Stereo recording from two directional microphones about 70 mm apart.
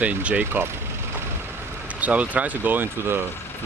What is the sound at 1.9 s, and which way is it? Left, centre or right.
Speech, right.